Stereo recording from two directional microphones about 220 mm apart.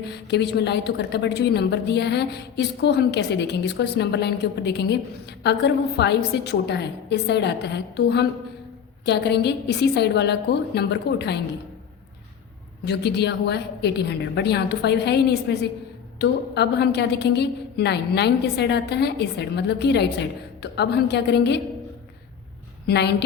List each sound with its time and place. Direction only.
0.0 s a woman's voice: 50° left (ahead or behind)
12.8 s a woman's voice: 50° left (ahead or behind)
22.9 s a woman's voice: 50° left (ahead or behind)